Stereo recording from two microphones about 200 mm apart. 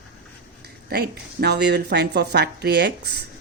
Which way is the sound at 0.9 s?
55° right (ahead or behind).